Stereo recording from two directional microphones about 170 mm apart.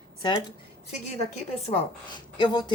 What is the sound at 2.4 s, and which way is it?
Speech, 25° left (ahead or behind).